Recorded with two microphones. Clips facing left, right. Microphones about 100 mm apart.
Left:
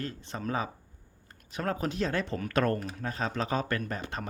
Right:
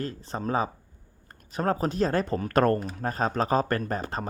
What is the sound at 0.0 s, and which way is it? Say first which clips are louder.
Speech: right 4 dB; 35° right (ahead or behind).